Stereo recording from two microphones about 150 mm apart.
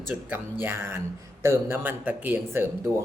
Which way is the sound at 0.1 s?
10° right (ahead or behind).